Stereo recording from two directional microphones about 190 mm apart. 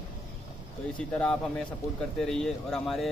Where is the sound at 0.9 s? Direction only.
5° left (ahead or behind).